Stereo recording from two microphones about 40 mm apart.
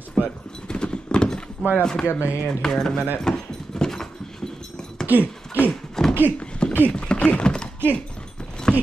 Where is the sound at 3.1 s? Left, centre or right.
Centre.